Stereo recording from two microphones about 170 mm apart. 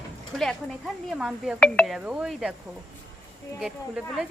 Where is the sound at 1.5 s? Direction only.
5° left (ahead or behind).